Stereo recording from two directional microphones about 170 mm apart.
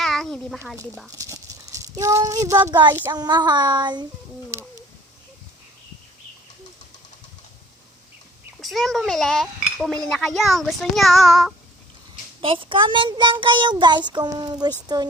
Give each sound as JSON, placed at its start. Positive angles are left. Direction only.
{"t": 0.0, "sound": "a sound", "side_deg": 0}
{"t": 0.7, "sound": "speech", "side_deg": 0}
{"t": 1.2, "sound": "speech", "side_deg": -20}
{"t": 8.6, "sound": "speech", "side_deg": 0}
{"t": 12.4, "sound": "speech", "side_deg": -30}